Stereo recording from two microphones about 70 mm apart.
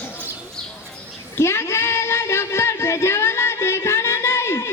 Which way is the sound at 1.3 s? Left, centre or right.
Left.